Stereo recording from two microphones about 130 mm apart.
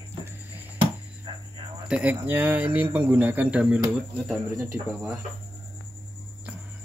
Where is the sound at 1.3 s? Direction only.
40° right (ahead or behind).